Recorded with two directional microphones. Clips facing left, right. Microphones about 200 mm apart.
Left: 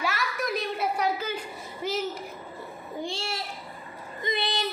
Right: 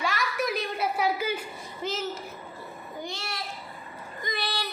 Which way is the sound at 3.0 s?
30° left (ahead or behind).